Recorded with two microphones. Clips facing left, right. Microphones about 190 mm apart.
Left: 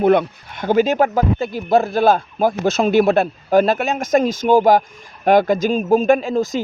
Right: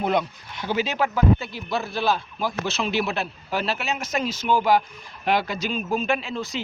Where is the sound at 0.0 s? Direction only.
55° left (ahead or behind).